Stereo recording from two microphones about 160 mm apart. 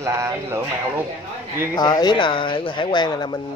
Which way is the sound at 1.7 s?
25° left (ahead or behind).